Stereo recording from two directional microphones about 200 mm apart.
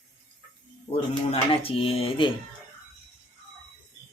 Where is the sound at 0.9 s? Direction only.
30° left (ahead or behind).